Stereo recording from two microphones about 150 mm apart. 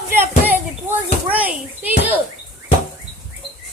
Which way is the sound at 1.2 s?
10° right (ahead or behind).